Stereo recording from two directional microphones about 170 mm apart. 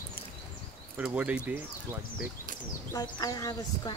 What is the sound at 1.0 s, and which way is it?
Speech, 10° right (ahead or behind).